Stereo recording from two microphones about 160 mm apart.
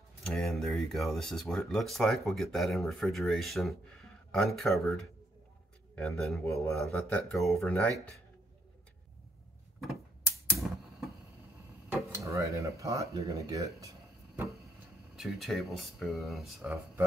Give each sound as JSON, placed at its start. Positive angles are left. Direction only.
{"t": 0.2, "sound": "speech", "side_deg": 0}
{"t": 12.1, "sound": "speech", "side_deg": -20}
{"t": 15.1, "sound": "speech", "side_deg": 0}